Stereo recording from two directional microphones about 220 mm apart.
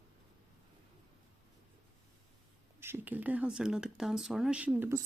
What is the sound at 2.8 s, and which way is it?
Speech, 10° right (ahead or behind).